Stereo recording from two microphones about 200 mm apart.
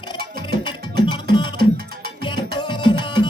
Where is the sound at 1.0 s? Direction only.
25° left (ahead or behind).